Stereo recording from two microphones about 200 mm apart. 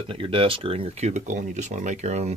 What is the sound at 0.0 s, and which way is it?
Speech, 25° right (ahead or behind).